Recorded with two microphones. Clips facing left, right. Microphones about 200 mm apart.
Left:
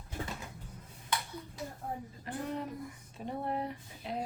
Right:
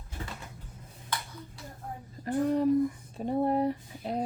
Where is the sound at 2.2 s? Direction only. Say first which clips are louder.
Right 13 dB; 40° right (ahead or behind).